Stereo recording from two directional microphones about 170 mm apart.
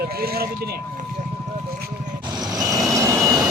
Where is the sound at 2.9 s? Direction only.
20° right (ahead or behind).